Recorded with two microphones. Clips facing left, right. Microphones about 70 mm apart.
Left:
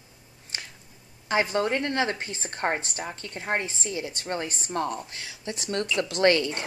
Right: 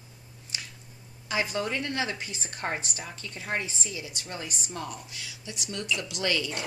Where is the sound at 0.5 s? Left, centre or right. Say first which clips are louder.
Left 2 dB; left.